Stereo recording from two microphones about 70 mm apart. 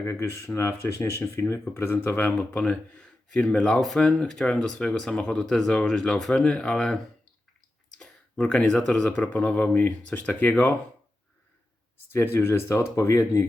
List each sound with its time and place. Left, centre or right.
0.0 s speech: left
2.5 s speech: centre
12.1 s speech: left